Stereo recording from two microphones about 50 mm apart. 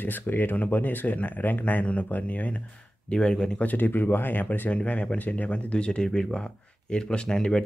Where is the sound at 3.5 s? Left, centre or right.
Left.